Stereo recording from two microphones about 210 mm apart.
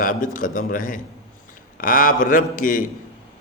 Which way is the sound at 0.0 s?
40° left (ahead or behind).